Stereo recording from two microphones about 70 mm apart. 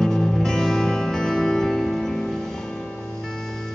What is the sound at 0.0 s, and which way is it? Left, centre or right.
Music, centre.